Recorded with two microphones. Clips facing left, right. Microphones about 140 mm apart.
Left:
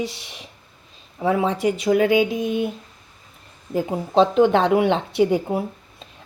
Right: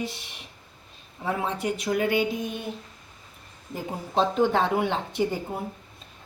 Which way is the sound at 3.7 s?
85° left.